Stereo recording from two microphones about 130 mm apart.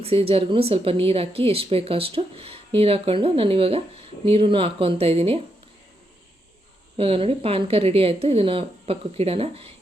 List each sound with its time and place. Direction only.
0.0 s speech: 45° right (ahead or behind)
6.9 s speech: 45° right (ahead or behind)